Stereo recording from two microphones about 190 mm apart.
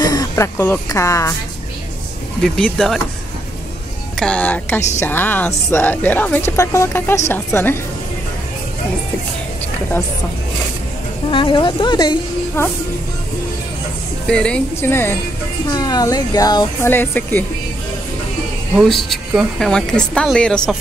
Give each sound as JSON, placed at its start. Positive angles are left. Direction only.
{"t": 0.0, "sound": "speech", "side_deg": 20}
{"t": 2.4, "sound": "a woman's voice", "side_deg": 5}
{"t": 4.2, "sound": "a woman's voice", "side_deg": 5}
{"t": 11.2, "sound": "speech", "side_deg": 25}
{"t": 14.2, "sound": "a woman's voice", "side_deg": 5}
{"t": 18.8, "sound": "a woman's voice", "side_deg": 0}